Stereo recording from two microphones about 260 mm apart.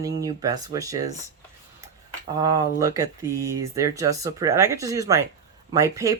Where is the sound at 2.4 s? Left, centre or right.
Centre.